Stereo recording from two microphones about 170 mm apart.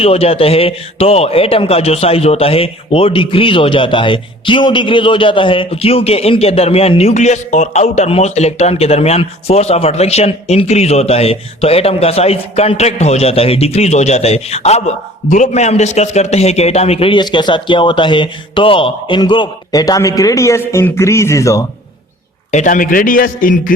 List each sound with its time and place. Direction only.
0.0 s a man's voice: 35° left (ahead or behind); by 21.6 s 20° left (ahead or behind)
22.5 s a man's voice: 50° left (ahead or behind)